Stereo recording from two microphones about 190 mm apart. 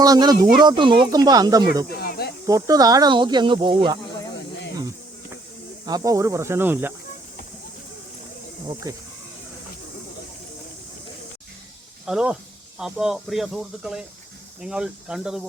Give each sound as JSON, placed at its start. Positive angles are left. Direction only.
{"t": 0.0, "sound": "speech", "side_deg": -20}
{"t": 2.0, "sound": "speech", "side_deg": 55}
{"t": 2.5, "sound": "speech", "side_deg": -20}
{"t": 5.8, "sound": "speech", "side_deg": -20}
{"t": 8.9, "sound": "speech", "side_deg": -20}
{"t": 12.0, "sound": "speech", "side_deg": -5}